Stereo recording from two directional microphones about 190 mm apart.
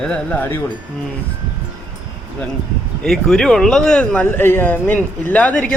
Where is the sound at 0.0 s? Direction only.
5° left (ahead or behind).